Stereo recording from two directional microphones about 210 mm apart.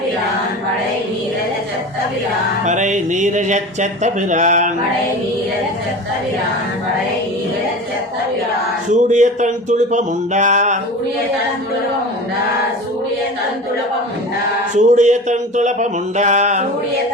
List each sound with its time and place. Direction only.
2.6 s speech: 35° right (ahead or behind)
8.9 s speech: 35° right (ahead or behind)
14.8 s speech: 35° right (ahead or behind)